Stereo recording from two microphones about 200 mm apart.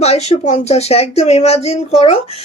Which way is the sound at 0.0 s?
30° left (ahead or behind).